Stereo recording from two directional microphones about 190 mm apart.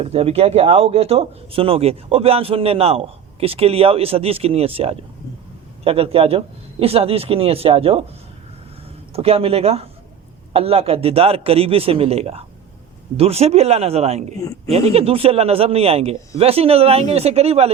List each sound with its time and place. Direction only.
0.0 s speech: 30° right (ahead or behind)
9.1 s speech: 30° right (ahead or behind)